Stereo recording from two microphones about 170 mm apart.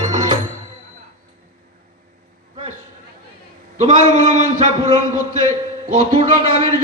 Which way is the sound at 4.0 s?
45° right (ahead or behind).